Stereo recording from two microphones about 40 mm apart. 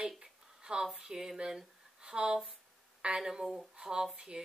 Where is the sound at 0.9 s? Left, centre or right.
Centre.